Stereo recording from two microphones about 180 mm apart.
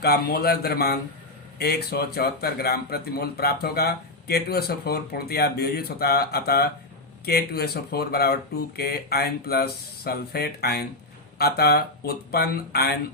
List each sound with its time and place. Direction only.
0.0 s speech: 60° left (ahead or behind)